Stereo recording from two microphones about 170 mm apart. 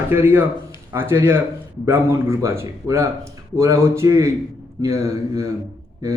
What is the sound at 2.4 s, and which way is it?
Speech, 15° right (ahead or behind).